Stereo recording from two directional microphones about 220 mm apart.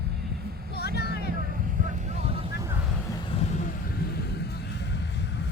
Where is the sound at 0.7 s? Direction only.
45° left (ahead or behind).